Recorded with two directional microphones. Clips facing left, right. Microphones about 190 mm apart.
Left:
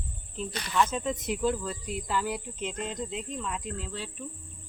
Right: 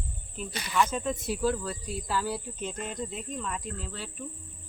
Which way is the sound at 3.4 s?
Centre (ahead or behind).